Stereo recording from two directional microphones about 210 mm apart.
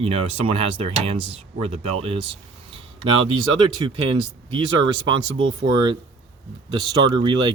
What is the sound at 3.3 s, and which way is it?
Speech, 20° right (ahead or behind).